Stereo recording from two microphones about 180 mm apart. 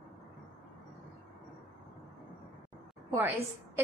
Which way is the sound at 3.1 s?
10° right (ahead or behind).